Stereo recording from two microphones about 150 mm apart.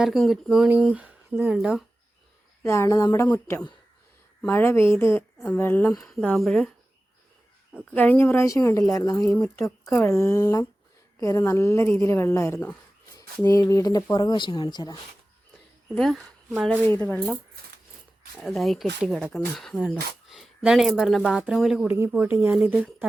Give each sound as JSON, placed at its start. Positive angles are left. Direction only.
{"t": 0.0, "sound": "speech", "side_deg": 0}
{"t": 2.6, "sound": "speech", "side_deg": 20}
{"t": 6.0, "sound": "speech", "side_deg": 5}
{"t": 7.9, "sound": "speech", "side_deg": 10}
{"t": 16.0, "sound": "speech", "side_deg": 0}
{"t": 18.4, "sound": "speech", "side_deg": 0}